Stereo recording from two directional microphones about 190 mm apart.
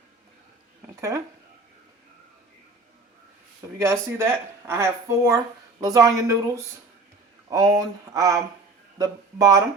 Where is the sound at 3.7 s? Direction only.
15° right (ahead or behind).